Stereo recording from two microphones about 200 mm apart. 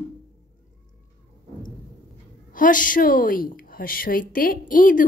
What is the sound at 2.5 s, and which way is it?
A woman's voice, 40° left (ahead or behind).